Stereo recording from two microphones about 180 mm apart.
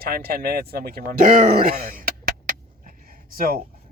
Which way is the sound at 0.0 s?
60° right (ahead or behind).